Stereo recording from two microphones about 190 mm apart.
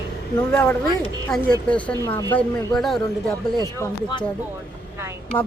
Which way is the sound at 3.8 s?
25° left (ahead or behind).